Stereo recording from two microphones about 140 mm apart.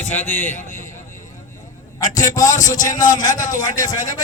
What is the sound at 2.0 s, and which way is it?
A man's voice, 65° left (ahead or behind).